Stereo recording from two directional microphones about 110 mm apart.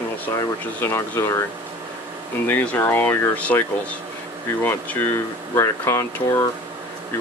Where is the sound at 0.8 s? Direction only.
20° left (ahead or behind).